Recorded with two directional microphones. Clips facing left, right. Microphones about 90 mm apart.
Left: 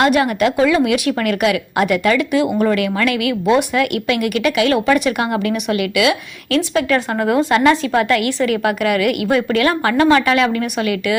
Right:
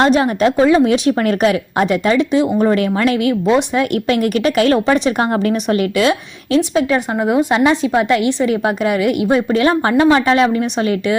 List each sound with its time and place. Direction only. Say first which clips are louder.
0.0 s a woman's voice: right 2 dB; 30° right (ahead or behind)
6.6 s a woman's voice: right 1 dB; 20° right (ahead or behind)